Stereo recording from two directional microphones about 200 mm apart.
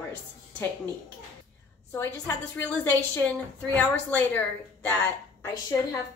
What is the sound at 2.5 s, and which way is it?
A woman's voice, 10° left (ahead or behind).